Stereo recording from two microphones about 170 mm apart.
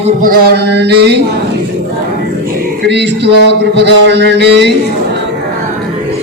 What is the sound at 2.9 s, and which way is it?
A man's voice, 90° right.